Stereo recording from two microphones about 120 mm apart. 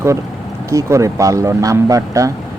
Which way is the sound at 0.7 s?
25° right (ahead or behind).